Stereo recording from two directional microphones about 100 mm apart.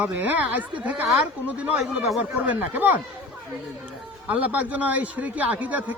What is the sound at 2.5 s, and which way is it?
Speech, 20° right (ahead or behind).